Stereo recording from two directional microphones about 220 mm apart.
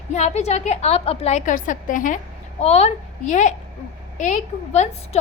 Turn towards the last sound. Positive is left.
turn(degrees=30)  # may be behind; listen again after turning